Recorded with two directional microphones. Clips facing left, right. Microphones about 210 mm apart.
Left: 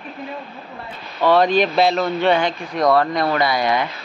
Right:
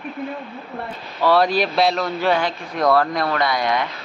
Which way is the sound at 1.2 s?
5° right (ahead or behind).